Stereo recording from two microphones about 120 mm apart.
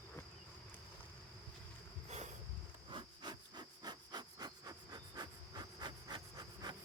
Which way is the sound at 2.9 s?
40° right (ahead or behind).